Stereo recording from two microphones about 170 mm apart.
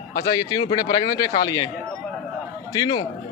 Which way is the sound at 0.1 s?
20° left (ahead or behind).